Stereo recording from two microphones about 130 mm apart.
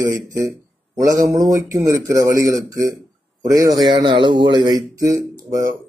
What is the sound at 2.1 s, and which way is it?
Speech, 25° right (ahead or behind).